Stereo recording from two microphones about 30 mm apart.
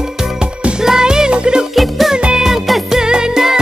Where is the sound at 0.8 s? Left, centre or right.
Right.